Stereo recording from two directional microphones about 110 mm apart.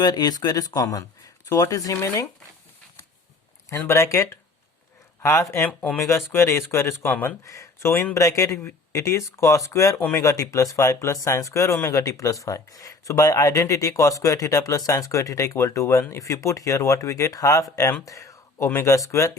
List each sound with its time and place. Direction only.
0.0 s speech: 35° left (ahead or behind)
3.7 s speech: 25° left (ahead or behind)